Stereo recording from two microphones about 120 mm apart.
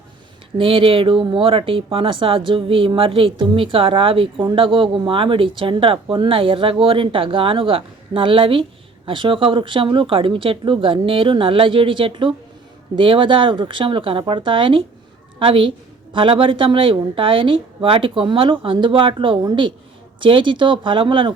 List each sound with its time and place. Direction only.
0.5 s speech: 50° right (ahead or behind)